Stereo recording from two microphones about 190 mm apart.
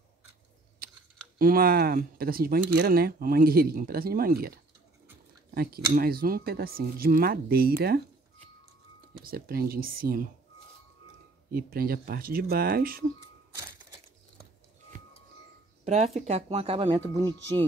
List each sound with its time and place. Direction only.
1.4 s speech: 50° right (ahead or behind)
9.2 s speech: 55° right (ahead or behind)
11.5 s speech: 50° right (ahead or behind)
14.9 s music: 40° right (ahead or behind)
15.8 s speech: 35° right (ahead or behind); by 17.4 s 20° right (ahead or behind)